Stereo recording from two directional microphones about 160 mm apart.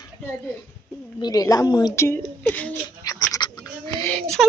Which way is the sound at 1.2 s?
25° left (ahead or behind).